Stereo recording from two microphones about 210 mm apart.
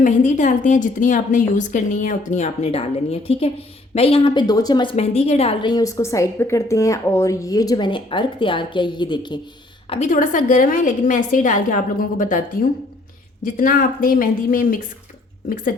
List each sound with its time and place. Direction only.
0.0 s a woman's voice: 35° left (ahead or behind)
9.9 s a woman's voice: 35° left (ahead or behind)
13.4 s speech: 40° left (ahead or behind)